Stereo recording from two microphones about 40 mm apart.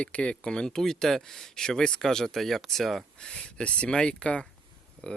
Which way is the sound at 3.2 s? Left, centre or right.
Left.